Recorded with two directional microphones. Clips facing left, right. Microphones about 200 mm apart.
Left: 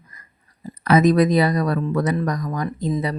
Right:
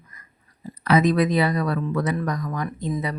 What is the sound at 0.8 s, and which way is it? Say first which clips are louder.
Speech: left 3 dB; 45° left (ahead or behind).